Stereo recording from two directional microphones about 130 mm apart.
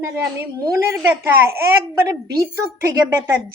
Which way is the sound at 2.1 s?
30° right (ahead or behind).